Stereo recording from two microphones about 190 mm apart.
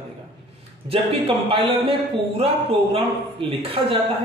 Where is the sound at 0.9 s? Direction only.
30° right (ahead or behind).